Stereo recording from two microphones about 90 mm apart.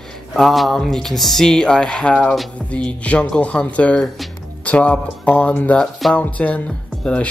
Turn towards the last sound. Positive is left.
turn(degrees=15)  # may be behind; listen again after turning